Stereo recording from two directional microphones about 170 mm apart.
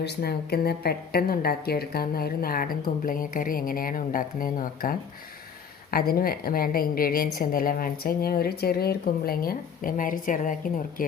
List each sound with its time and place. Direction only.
0.0 s a woman's voice: 70° left (ahead or behind); by 11.0 s 50° left (ahead or behind)